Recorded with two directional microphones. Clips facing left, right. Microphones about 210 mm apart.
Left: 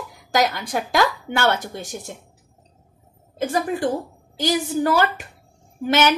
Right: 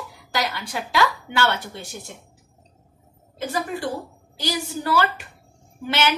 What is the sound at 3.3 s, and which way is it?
A woman's voice, 50° left (ahead or behind).